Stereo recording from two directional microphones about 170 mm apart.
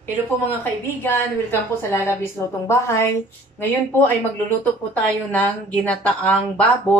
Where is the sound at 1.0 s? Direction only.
15° left (ahead or behind).